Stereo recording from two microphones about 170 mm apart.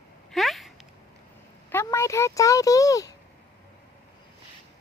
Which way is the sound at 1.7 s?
15° left (ahead or behind).